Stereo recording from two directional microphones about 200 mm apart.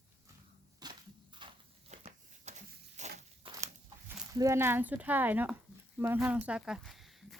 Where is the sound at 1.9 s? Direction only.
35° right (ahead or behind).